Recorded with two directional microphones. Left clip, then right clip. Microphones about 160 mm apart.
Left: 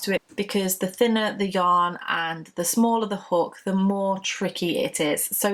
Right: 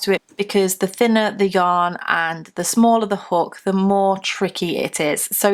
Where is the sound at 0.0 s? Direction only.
35° right (ahead or behind).